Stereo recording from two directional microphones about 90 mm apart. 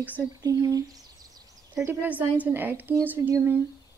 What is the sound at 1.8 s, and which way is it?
A woman's voice, 20° right (ahead or behind).